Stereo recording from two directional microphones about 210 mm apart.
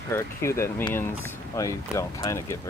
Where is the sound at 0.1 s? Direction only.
15° left (ahead or behind).